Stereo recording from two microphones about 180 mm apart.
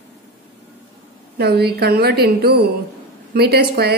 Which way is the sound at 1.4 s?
65° right (ahead or behind).